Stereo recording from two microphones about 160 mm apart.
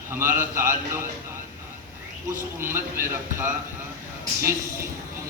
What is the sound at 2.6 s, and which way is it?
Speech, 15° right (ahead or behind).